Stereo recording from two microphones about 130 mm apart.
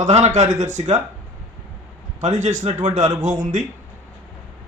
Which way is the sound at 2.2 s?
65° right (ahead or behind).